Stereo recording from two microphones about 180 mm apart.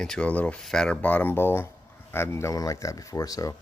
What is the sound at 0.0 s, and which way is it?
Speech, 5° left (ahead or behind).